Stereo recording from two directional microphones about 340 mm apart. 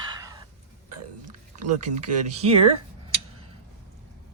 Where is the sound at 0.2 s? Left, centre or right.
Centre.